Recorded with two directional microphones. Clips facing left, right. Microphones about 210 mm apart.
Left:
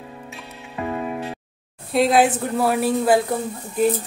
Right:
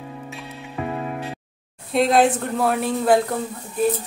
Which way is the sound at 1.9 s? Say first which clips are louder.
Even; 5° left (ahead or behind).